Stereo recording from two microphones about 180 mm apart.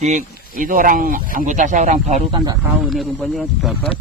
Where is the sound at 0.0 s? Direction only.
45° right (ahead or behind).